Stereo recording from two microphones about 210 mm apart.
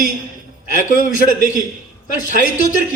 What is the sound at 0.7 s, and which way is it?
Speech, 40° left (ahead or behind).